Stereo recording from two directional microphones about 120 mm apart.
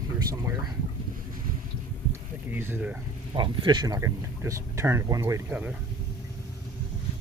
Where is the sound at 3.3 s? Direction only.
40° right (ahead or behind).